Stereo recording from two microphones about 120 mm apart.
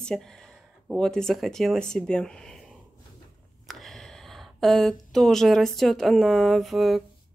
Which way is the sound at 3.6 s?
Centre (ahead or behind).